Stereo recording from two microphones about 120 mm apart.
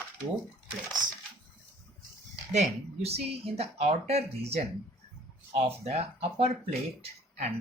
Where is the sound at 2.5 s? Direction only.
65° right (ahead or behind).